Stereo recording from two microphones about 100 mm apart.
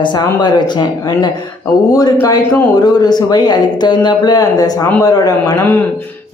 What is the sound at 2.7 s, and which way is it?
Speech, 45° left (ahead or behind).